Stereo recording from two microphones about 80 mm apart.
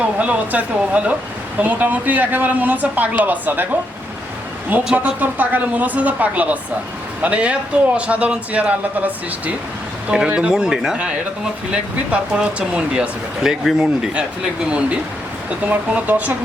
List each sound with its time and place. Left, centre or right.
0.0 s speech: centre
4.8 s speech: centre
5.2 s speech: right